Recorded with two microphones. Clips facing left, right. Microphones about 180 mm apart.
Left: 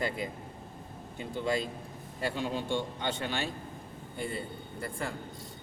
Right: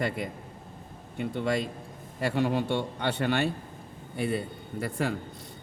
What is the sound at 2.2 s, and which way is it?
A man's voice, 70° right (ahead or behind).